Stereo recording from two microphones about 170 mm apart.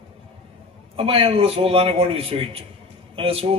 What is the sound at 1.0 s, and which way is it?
A man's voice, 35° right (ahead or behind).